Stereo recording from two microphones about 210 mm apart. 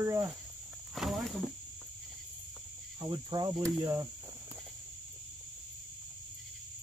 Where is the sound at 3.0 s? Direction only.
20° right (ahead or behind).